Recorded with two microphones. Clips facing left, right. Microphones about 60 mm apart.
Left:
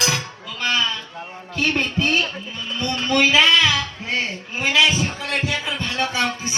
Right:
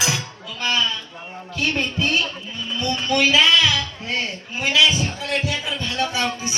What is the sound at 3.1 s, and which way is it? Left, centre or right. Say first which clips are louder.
Child singing: left 1 dB; left.